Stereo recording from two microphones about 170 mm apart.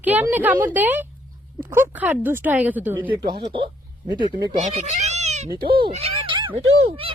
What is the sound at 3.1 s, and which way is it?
Speech, 25° right (ahead or behind).